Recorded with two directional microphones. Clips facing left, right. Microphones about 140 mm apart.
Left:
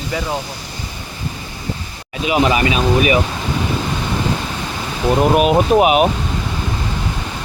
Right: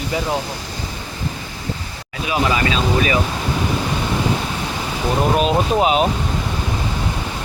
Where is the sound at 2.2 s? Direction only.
20° left (ahead or behind).